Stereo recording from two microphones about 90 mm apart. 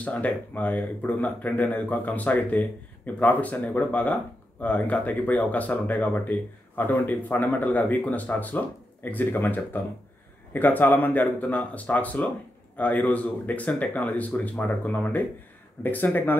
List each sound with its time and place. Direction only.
0.0 s speech: 15° left (ahead or behind)